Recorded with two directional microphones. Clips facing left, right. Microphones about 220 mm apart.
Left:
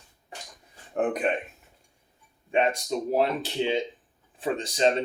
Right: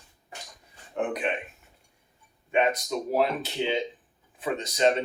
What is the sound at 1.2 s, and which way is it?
Speech, 40° left (ahead or behind).